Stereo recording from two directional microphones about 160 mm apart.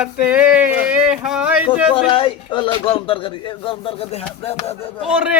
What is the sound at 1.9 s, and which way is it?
Speech, 35° left (ahead or behind).